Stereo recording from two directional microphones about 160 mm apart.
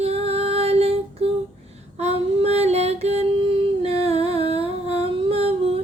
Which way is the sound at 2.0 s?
40° right (ahead or behind).